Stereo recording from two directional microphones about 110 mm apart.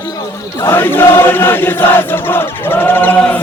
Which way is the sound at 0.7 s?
20° left (ahead or behind).